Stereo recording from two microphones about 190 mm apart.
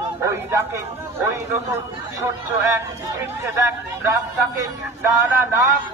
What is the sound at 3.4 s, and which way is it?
Speech, 15° right (ahead or behind).